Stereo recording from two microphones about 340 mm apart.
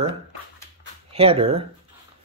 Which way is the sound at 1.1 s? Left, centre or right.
Centre.